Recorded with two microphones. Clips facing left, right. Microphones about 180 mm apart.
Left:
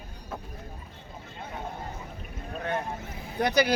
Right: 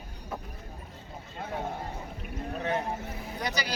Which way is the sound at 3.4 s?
55° left (ahead or behind).